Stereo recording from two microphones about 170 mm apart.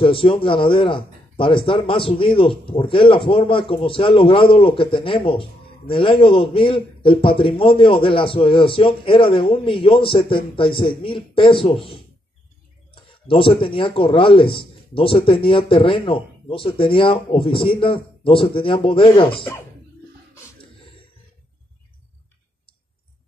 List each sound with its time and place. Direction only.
0.0 s speech: 30° left (ahead or behind)